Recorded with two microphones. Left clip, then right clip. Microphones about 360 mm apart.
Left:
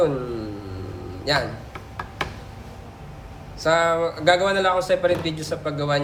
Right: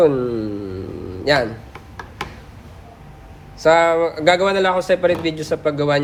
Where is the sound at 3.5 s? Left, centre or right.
Centre.